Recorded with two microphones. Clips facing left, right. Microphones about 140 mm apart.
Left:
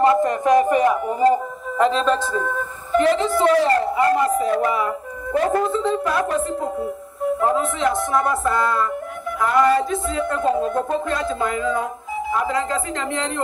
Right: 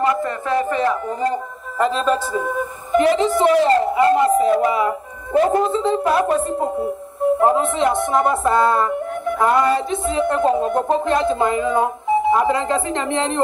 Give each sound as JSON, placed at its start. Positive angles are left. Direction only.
{"t": 0.2, "sound": "speech", "side_deg": 15}
{"t": 1.8, "sound": "a man's voice", "side_deg": -5}